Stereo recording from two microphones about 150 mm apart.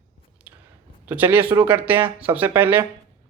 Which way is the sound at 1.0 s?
10° right (ahead or behind).